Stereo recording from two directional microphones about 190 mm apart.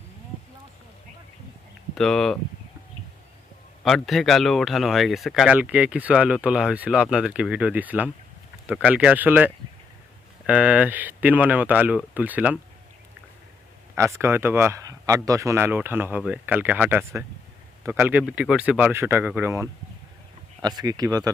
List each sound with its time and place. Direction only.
2.0 s speech: centre (ahead or behind)
3.8 s speech: centre (ahead or behind)
14.2 s speech: 15° right (ahead or behind)